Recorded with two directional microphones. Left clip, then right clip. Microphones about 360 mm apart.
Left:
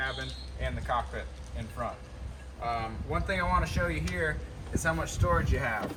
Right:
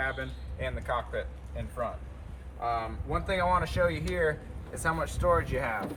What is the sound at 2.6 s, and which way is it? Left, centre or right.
Speech, centre.